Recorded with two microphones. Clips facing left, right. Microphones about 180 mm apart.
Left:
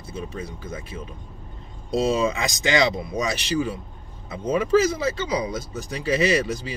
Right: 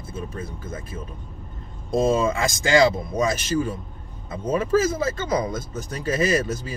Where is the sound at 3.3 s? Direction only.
45° right (ahead or behind).